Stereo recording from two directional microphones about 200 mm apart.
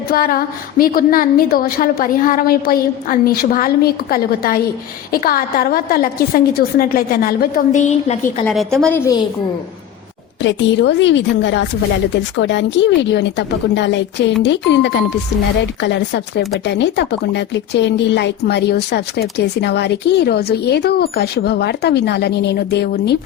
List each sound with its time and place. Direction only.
0.1 s a woman's voice: 45° left (ahead or behind)
8.4 s a woman's voice: 5° left (ahead or behind)
10.4 s speech: 60° left (ahead or behind)